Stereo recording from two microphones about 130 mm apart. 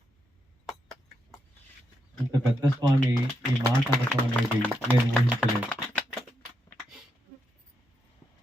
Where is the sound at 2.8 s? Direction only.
35° right (ahead or behind).